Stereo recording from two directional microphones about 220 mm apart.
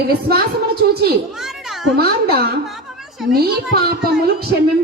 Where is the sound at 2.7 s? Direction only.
Centre (ahead or behind).